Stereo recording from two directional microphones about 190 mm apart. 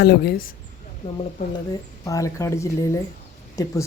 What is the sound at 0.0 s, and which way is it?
Speech, 55° left (ahead or behind).